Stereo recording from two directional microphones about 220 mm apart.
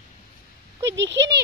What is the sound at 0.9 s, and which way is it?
Speech, 55° right (ahead or behind).